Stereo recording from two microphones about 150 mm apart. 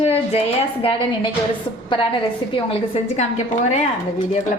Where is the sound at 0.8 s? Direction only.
35° left (ahead or behind).